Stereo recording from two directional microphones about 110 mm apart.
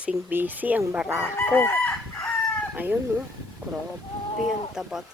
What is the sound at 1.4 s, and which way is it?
Chicken, 20° left (ahead or behind).